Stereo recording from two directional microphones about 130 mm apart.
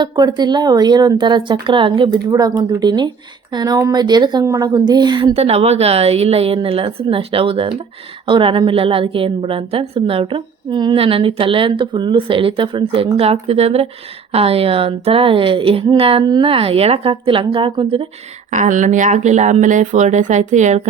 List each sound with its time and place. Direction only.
0.0 s speech: 35° right (ahead or behind)
5.3 s speech: 55° right (ahead or behind); by 10.9 s 35° right (ahead or behind)
10.9 s speech: 45° right (ahead or behind)
18.5 s speech: 70° right (ahead or behind)